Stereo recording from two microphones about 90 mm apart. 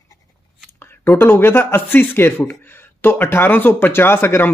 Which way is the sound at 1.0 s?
25° left (ahead or behind).